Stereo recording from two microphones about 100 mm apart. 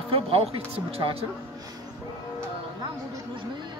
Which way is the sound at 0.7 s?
75° right (ahead or behind).